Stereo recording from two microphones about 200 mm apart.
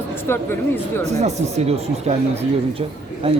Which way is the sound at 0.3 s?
10° left (ahead or behind).